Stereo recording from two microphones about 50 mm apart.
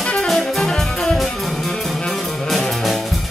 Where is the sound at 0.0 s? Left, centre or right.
Centre.